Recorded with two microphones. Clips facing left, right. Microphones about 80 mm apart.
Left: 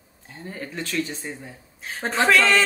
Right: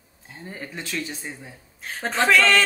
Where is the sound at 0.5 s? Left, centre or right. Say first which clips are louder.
Left 2 dB; centre.